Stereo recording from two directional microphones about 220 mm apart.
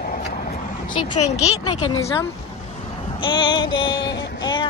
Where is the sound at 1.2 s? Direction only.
30° left (ahead or behind).